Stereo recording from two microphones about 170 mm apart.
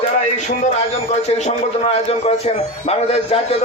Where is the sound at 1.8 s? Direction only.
35° left (ahead or behind).